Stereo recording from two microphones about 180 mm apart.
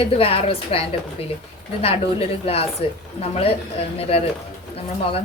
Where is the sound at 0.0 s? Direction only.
30° left (ahead or behind).